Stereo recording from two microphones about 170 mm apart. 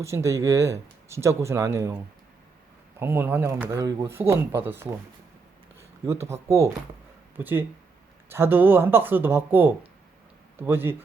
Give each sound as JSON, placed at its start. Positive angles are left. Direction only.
{"t": 0.0, "sound": "speech", "side_deg": -15}
{"t": 3.0, "sound": "speech", "side_deg": -10}
{"t": 6.1, "sound": "speech", "side_deg": -15}